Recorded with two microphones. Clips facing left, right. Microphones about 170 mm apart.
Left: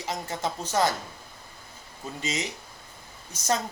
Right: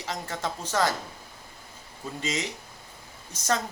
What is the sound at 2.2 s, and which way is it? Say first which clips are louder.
Speech: right 1 dB; 20° left (ahead or behind).